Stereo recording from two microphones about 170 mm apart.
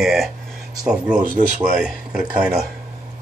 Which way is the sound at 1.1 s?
50° right (ahead or behind).